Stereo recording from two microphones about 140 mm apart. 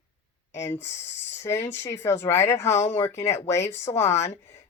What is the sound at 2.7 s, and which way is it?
Speech, 55° left (ahead or behind).